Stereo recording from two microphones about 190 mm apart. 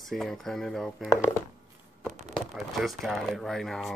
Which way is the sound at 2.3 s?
Centre (ahead or behind).